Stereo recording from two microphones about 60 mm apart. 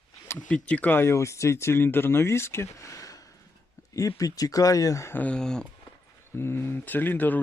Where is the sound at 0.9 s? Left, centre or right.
Left.